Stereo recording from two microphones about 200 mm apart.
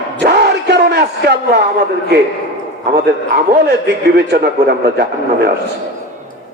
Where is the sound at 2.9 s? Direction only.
55° right (ahead or behind).